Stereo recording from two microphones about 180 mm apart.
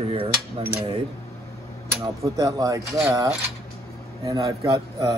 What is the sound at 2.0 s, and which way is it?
Speech, 20° right (ahead or behind).